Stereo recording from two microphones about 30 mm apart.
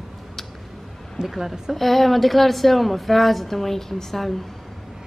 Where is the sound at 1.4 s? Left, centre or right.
Centre.